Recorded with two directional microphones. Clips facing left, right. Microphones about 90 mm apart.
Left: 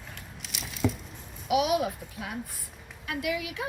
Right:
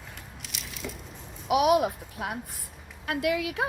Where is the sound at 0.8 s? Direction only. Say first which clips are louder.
Left 11 dB; 70° left (ahead or behind).